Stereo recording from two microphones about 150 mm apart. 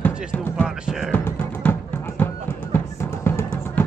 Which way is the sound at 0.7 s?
5° right (ahead or behind).